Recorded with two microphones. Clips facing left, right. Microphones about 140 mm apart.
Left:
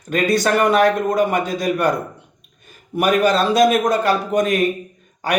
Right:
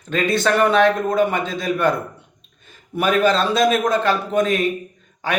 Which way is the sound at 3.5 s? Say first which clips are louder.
Left 2 dB; 45° left (ahead or behind).